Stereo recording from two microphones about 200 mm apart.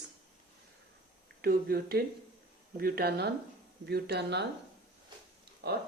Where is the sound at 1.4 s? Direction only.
50° right (ahead or behind).